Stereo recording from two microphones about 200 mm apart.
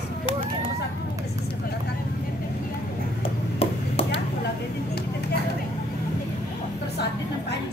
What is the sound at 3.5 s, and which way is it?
Chop, 30° left (ahead or behind).